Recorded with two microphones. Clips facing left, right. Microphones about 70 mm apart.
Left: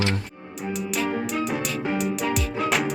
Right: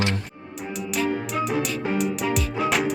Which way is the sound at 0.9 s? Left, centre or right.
Centre.